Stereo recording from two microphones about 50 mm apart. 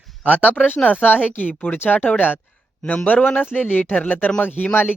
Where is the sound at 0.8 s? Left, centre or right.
Left.